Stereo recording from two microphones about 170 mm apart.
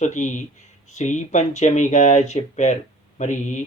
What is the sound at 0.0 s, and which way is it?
Speech, 45° left (ahead or behind).